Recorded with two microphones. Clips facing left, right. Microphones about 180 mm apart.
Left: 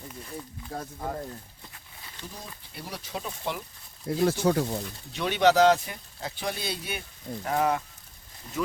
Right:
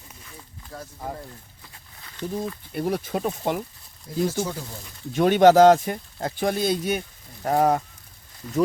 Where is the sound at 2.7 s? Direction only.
50° right (ahead or behind).